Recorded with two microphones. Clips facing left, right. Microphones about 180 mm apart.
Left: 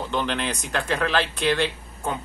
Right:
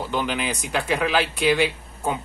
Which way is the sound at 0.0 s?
5° right (ahead or behind).